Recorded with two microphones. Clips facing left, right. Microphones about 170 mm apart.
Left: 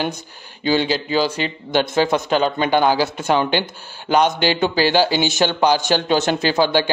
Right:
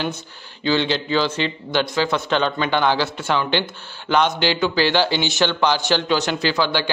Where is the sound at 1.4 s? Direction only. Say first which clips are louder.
Left 2 dB; 45° left (ahead or behind).